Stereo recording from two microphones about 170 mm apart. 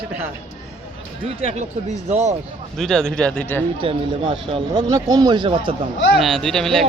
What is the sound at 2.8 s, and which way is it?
Speech, 5° left (ahead or behind).